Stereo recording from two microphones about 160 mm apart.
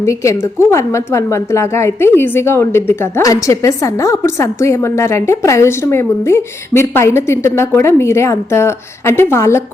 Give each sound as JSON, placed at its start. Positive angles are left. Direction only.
{"t": 0.0, "sound": "a woman's voice", "side_deg": 20}